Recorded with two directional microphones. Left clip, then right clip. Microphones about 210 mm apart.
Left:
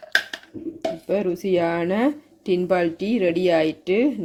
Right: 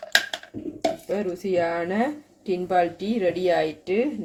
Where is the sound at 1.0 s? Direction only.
45° left (ahead or behind).